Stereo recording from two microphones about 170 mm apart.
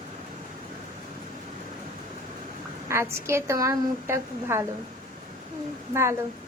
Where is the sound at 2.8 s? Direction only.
15° right (ahead or behind).